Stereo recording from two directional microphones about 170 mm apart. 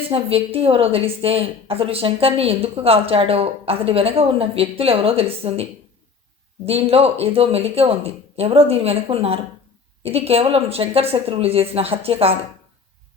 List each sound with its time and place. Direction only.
0.1 s a woman's voice: 35° right (ahead or behind)
6.7 s a woman's voice: 35° right (ahead or behind)